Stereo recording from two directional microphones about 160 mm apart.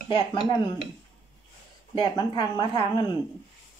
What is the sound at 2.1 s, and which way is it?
Speech, 30° left (ahead or behind).